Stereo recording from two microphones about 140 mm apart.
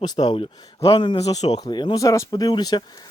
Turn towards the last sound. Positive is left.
turn(degrees=30)  # may be behind; listen again after turning